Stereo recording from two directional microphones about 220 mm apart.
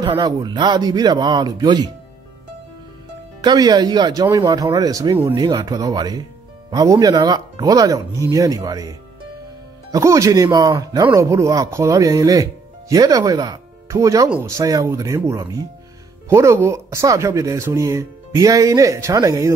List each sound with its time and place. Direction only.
0.0 s speech: 20° right (ahead or behind)
3.3 s speech: 20° right (ahead or behind)